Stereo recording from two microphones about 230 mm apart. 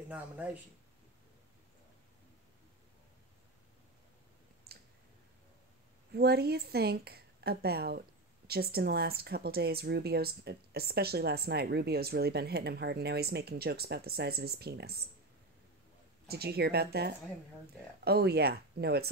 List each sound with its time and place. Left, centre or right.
0.1 s speech: centre
4.7 s clicking: right
6.1 s speech: right
16.3 s speech: right